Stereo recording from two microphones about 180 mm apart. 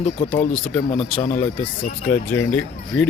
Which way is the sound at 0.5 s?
5° left (ahead or behind).